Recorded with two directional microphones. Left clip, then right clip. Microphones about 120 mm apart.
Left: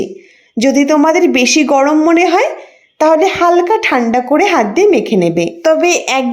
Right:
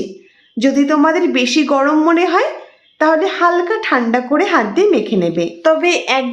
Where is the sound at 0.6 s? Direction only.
35° left (ahead or behind).